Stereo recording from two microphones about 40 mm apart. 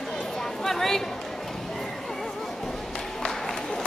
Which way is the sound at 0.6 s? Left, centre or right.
Centre.